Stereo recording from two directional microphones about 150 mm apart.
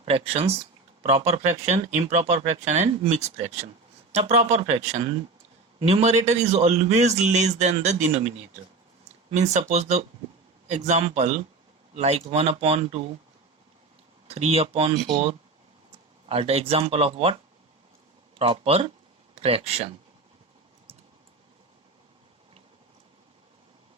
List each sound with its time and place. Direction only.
0.0 s speech: 40° right (ahead or behind)
9.3 s speech: 50° right (ahead or behind)
14.3 s speech: 45° right (ahead or behind)
18.3 s speech: 40° right (ahead or behind)